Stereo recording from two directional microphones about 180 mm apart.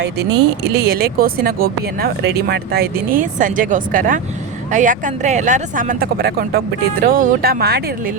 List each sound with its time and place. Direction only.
0.0 s speech: 70° right (ahead or behind)
0.6 s speech: 60° right (ahead or behind)